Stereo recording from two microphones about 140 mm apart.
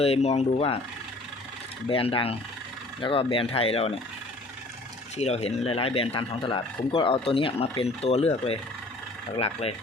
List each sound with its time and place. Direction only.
0.0 s speech: 45° left (ahead or behind)
1.9 s speech: 40° left (ahead or behind)
5.1 s speech: 50° left (ahead or behind)